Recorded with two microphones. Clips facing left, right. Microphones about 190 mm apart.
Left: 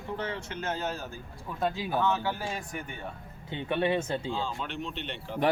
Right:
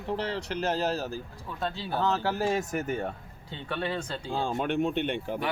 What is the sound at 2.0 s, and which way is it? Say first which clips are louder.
Speech: right 3 dB; 40° right (ahead or behind).